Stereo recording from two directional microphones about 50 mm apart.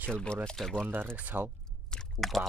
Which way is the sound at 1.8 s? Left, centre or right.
Centre.